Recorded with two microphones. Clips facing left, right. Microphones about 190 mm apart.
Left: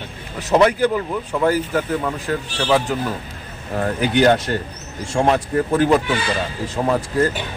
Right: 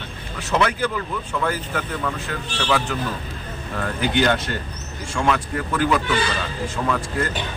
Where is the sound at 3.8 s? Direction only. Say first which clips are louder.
Left 4 dB; 45° left (ahead or behind).